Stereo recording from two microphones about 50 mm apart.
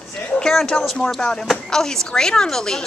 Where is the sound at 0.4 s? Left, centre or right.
Centre.